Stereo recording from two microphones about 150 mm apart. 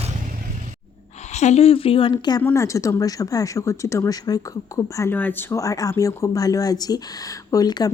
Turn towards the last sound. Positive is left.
turn(degrees=25)  # may be behind; listen again after turning